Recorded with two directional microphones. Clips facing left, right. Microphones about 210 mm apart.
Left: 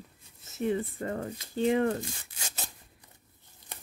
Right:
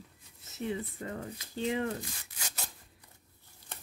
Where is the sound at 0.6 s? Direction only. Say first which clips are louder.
Left 6 dB; 50° left (ahead or behind).